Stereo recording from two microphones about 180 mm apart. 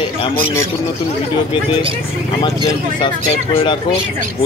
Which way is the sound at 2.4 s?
25° left (ahead or behind).